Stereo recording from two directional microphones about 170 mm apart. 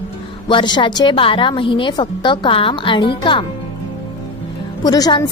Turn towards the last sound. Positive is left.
turn(degrees=25)  # may be behind; listen again after turning